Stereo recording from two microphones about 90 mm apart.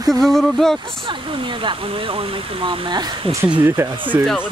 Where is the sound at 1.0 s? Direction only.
70° right (ahead or behind); by 3.1 s 50° right (ahead or behind).